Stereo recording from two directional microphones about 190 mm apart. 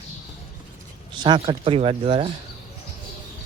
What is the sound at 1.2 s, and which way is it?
Speech, 25° right (ahead or behind).